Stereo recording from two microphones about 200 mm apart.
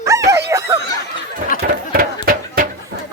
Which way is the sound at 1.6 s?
45° right (ahead or behind).